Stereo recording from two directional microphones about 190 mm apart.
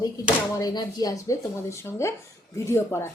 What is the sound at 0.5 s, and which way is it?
Speech, 20° left (ahead or behind).